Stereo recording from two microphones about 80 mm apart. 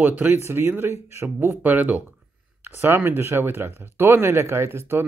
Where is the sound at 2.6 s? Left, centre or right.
Right.